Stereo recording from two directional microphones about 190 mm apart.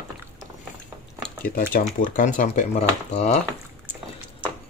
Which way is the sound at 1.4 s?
50° left (ahead or behind).